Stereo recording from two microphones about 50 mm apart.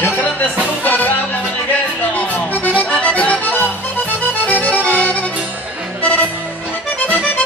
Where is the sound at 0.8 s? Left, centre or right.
Left.